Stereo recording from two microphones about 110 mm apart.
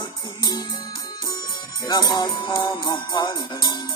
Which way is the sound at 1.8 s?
40° left (ahead or behind).